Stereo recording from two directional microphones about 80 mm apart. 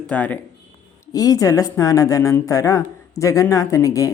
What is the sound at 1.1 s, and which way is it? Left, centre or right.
Speech, left.